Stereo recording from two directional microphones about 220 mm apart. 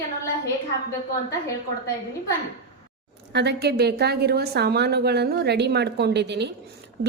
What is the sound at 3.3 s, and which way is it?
A woman's voice, 50° right (ahead or behind).